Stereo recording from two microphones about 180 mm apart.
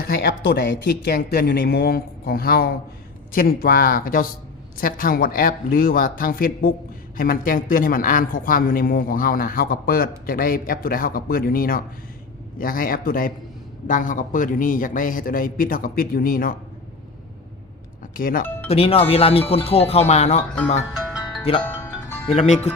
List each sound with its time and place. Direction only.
0.0 s a man's voice: 55° left (ahead or behind)
18.2 s a man's voice: 50° left (ahead or behind)
18.7 s speech: 35° left (ahead or behind)
21.1 s music: 5° right (ahead or behind)
21.6 s music: 10° left (ahead or behind)
22.3 s speech: 35° left (ahead or behind)